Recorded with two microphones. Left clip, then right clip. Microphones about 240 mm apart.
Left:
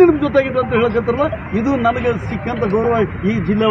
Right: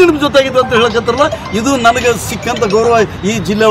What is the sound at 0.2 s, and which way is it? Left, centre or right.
Speech, right.